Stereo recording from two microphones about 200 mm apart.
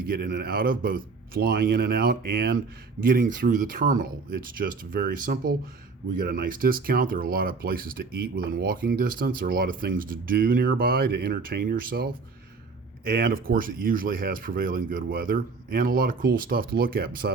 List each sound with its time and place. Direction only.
0.1 s speech: 50° right (ahead or behind)